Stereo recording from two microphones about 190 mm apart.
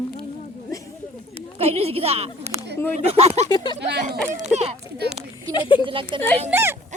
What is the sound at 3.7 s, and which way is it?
Speech, 60° right (ahead or behind).